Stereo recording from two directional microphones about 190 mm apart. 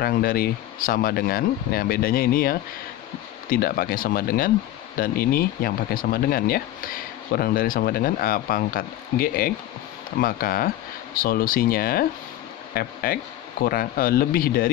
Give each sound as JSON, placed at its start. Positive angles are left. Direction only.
{"t": 0.0, "sound": "speech", "side_deg": 50}